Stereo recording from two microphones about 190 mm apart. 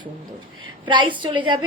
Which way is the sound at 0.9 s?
25° right (ahead or behind).